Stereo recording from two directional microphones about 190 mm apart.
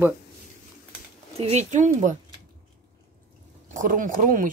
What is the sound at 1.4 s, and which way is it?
Speech, 35° right (ahead or behind).